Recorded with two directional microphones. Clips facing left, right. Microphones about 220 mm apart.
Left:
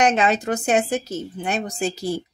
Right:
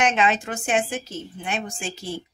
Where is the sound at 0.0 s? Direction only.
40° left (ahead or behind).